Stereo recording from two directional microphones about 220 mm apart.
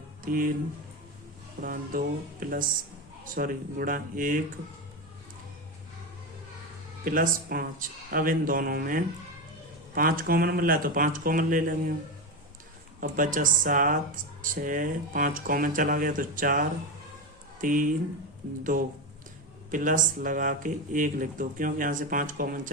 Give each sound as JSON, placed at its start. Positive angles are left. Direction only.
{"t": 0.2, "sound": "speech", "side_deg": -40}
{"t": 1.6, "sound": "speech", "side_deg": -40}
{"t": 7.0, "sound": "speech", "side_deg": -40}
{"t": 13.0, "sound": "speech", "side_deg": -35}